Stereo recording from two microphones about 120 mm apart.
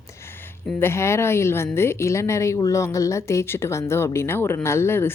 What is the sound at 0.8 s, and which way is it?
A woman's voice, 20° left (ahead or behind).